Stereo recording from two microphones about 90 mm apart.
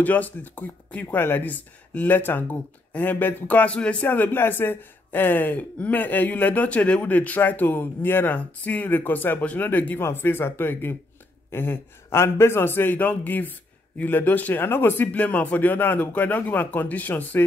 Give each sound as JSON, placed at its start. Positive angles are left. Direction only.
{"t": 0.0, "sound": "speech", "side_deg": 20}